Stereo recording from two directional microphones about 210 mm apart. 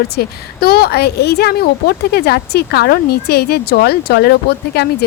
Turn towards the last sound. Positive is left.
turn(degrees=50)  # may be behind; listen again after turning